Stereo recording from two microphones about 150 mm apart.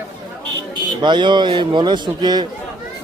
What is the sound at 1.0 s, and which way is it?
A man's voice, 30° right (ahead or behind).